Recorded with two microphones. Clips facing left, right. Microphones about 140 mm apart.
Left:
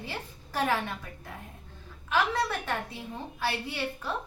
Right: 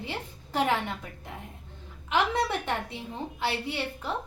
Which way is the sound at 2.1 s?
20° right (ahead or behind).